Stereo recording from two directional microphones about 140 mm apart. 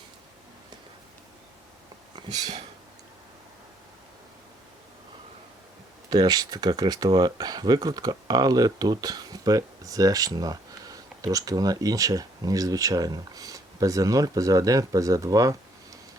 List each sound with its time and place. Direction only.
6.1 s speech: 25° right (ahead or behind)